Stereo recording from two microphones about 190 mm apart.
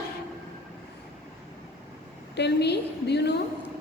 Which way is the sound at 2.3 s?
60° left (ahead or behind).